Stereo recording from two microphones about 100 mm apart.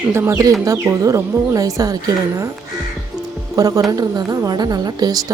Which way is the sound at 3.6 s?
35° right (ahead or behind).